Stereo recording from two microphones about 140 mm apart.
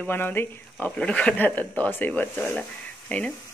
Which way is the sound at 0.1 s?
15° left (ahead or behind).